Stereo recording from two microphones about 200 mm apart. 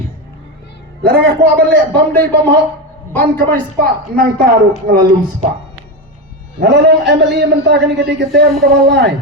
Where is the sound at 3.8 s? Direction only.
50° right (ahead or behind).